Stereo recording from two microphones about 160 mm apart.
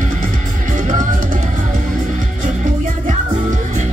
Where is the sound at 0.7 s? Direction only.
50° right (ahead or behind).